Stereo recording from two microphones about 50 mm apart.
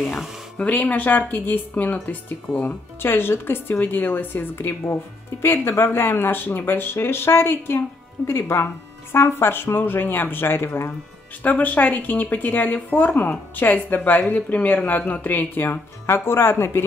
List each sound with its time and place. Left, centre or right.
0.6 s speech: left
3.0 s speech: left
11.4 s speech: left